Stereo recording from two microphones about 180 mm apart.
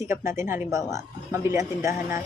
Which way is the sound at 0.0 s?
15° right (ahead or behind).